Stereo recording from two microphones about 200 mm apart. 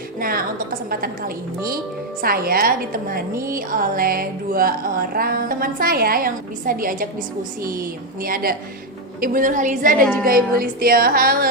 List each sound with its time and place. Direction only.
0.2 s music: 45° right (ahead or behind)
8.2 s music: 45° right (ahead or behind)
9.2 s a woman's voice: 40° right (ahead or behind)
10.2 s music: 45° right (ahead or behind)